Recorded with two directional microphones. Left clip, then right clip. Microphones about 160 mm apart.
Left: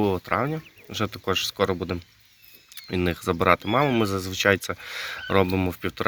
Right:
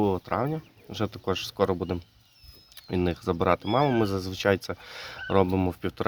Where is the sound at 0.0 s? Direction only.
5° left (ahead or behind).